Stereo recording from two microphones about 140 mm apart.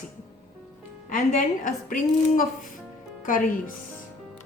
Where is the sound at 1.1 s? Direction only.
60° left (ahead or behind); by 3.5 s 75° left (ahead or behind).